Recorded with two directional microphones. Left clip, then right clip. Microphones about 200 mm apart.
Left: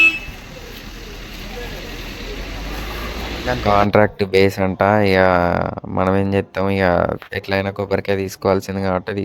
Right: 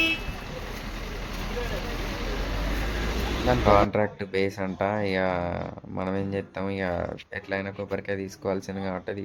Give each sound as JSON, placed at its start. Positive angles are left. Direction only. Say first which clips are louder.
{"t": 3.7, "sound": "speech", "louder": "left 8 dB", "side_deg": 40}